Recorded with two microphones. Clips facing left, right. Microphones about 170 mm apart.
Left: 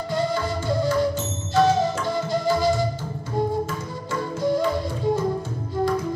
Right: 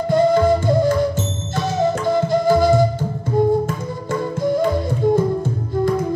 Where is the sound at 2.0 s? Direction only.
50° right (ahead or behind).